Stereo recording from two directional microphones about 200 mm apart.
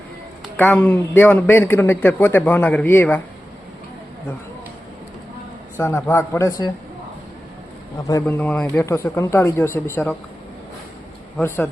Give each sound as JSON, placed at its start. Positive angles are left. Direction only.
{"t": 0.5, "sound": "a man's voice", "side_deg": 10}
{"t": 5.7, "sound": "a man's voice", "side_deg": 10}
{"t": 7.9, "sound": "speech", "side_deg": 20}
{"t": 8.2, "sound": "a man's voice", "side_deg": 5}
{"t": 11.3, "sound": "a man's voice", "side_deg": 10}